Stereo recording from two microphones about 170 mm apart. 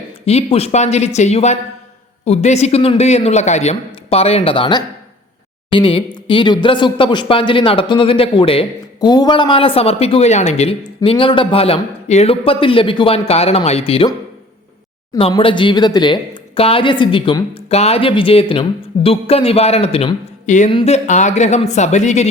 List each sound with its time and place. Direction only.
0.3 s speech: 35° left (ahead or behind)
15.3 s speech: 30° left (ahead or behind)